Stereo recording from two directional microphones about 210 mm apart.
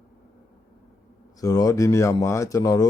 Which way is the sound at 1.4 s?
15° left (ahead or behind).